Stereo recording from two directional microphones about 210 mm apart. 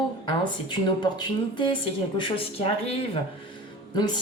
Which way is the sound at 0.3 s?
20° left (ahead or behind).